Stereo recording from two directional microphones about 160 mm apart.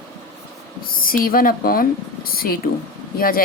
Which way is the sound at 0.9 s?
65° left (ahead or behind).